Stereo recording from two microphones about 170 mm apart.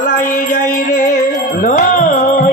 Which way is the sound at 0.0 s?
50° left (ahead or behind).